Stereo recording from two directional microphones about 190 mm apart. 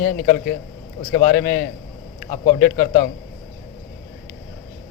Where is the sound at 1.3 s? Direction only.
50° left (ahead or behind).